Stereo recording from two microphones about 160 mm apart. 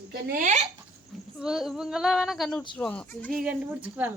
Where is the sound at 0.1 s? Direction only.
65° right (ahead or behind); by 0.7 s 50° right (ahead or behind).